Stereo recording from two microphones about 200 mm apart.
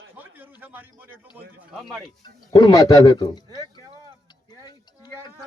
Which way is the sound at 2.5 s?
20° left (ahead or behind).